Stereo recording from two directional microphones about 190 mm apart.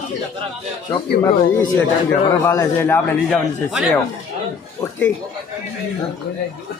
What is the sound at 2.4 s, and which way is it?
Speech, 15° left (ahead or behind).